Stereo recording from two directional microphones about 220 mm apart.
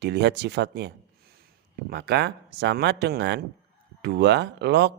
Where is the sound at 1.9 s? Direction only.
45° right (ahead or behind).